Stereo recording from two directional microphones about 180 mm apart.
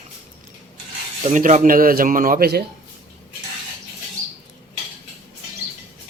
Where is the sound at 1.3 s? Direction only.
45° right (ahead or behind); by 2.6 s 60° right (ahead or behind).